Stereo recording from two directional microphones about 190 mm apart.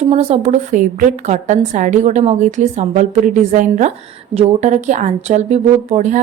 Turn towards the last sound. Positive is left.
turn(degrees=-40)  # may be behind; listen again after turning